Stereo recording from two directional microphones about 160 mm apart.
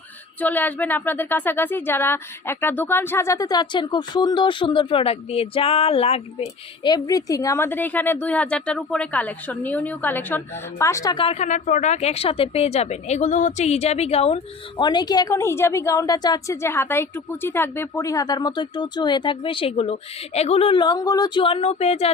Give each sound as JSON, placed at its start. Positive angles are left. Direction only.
{"t": 0.3, "sound": "speech", "side_deg": 10}
{"t": 6.8, "sound": "a woman's voice", "side_deg": 25}